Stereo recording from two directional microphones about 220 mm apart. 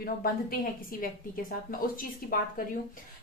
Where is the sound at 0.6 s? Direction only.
40° left (ahead or behind).